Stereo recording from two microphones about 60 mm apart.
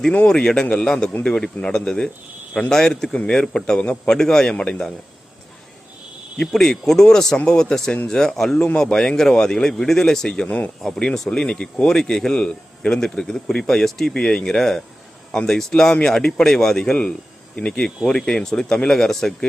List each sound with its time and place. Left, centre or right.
0.3 s a man's voice: centre
6.4 s a man's voice: centre
8.5 s a man's voice: centre